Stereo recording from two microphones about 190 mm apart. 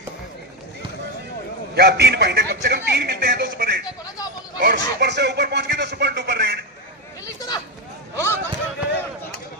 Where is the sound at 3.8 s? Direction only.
20° left (ahead or behind).